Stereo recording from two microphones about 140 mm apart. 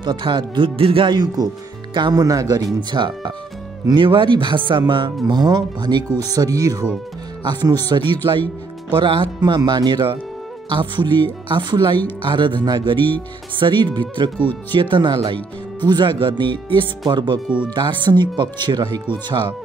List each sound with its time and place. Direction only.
0.0 s speech: 35° right (ahead or behind)